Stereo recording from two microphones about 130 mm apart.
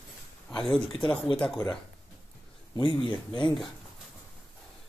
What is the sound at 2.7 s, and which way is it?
Speech, 40° left (ahead or behind).